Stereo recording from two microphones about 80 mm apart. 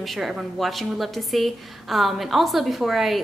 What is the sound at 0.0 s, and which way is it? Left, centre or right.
A woman's voice, centre.